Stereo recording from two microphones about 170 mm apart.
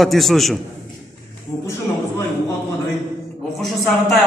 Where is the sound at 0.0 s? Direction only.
Centre (ahead or behind).